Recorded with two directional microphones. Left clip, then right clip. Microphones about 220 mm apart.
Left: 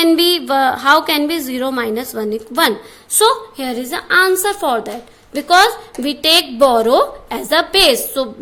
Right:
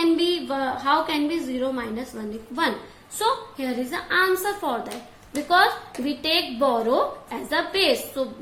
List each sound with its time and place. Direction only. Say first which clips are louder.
0.0 s a woman's voice: left 9 dB; 50° left (ahead or behind)